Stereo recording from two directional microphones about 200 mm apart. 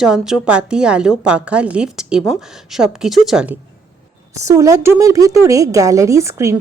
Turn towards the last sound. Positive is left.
turn(degrees=-15)  # may be behind; listen again after turning